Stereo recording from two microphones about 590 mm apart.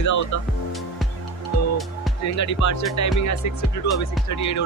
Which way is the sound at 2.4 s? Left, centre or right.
Left.